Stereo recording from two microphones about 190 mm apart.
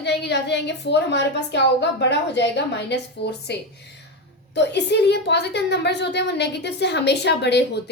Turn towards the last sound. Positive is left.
turn(degrees=65)  # may be behind; listen again after turning